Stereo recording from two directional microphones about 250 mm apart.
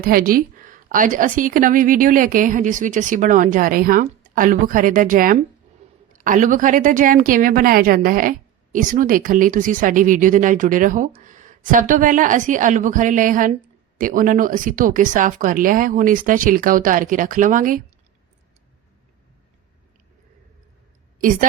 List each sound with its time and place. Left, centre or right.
0.0 s a woman's voice: right